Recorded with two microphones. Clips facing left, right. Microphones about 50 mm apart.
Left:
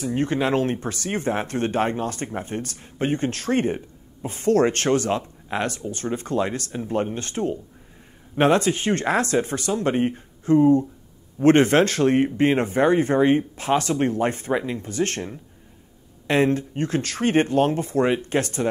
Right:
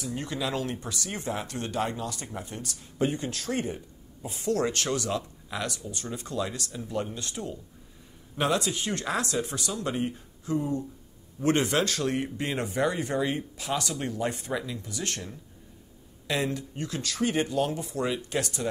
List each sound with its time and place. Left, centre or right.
0.0 s speech: left